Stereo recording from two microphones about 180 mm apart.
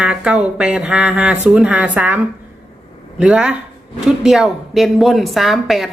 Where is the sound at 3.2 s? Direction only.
5° right (ahead or behind).